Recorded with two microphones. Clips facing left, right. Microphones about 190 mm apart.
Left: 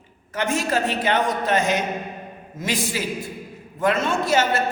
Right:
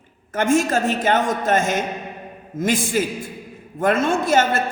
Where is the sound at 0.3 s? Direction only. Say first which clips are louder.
Right 5 dB; 50° right (ahead or behind).